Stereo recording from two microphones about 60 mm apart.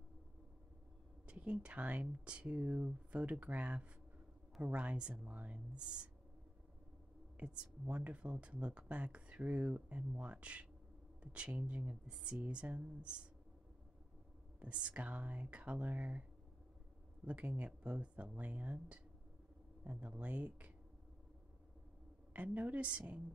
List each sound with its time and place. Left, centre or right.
1.2 s speech: centre
5.2 s speech: right
7.3 s speech: right
14.6 s speech: right
17.3 s speech: right
22.3 s speech: right